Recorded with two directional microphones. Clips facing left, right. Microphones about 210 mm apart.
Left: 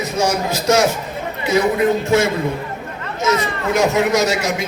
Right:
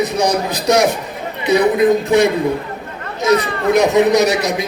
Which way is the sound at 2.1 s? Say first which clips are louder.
Right 3 dB; 15° right (ahead or behind).